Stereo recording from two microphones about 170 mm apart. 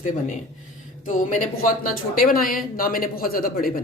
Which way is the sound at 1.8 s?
55° left (ahead or behind).